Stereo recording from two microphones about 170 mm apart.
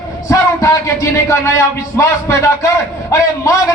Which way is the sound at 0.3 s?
15° left (ahead or behind).